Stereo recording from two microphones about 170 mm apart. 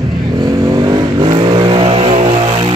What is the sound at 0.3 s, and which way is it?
Vehicle, 25° right (ahead or behind).